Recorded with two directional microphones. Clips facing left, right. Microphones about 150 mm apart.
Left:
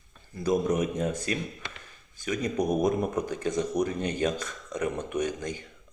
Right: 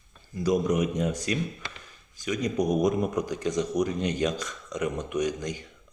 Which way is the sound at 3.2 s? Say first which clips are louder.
Right 1 dB; 55° left (ahead or behind).